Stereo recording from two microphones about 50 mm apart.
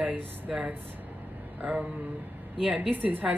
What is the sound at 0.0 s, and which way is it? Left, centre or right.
Speech, right.